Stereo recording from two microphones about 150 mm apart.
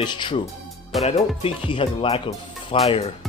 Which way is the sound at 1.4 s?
35° left (ahead or behind).